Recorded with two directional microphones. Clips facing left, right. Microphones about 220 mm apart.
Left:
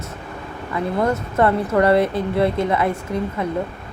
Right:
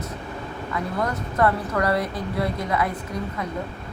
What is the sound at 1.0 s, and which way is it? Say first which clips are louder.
A woman's voice: left 4 dB; 25° left (ahead or behind).